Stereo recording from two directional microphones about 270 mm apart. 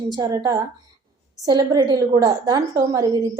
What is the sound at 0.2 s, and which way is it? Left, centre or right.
A woman's voice, centre.